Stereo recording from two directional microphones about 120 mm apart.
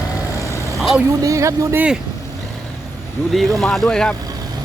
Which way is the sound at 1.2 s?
25° right (ahead or behind).